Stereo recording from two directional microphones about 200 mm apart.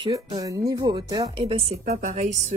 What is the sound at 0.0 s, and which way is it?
A woman's voice, 20° right (ahead or behind).